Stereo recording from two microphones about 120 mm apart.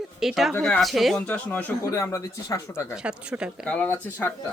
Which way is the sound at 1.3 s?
15° left (ahead or behind).